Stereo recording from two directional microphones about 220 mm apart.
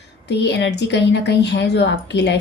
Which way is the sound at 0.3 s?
50° left (ahead or behind).